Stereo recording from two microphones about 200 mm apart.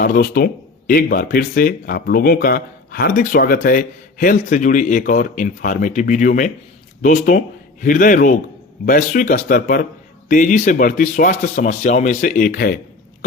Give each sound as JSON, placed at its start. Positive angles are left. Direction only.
{"t": 0.0, "sound": "speech", "side_deg": 45}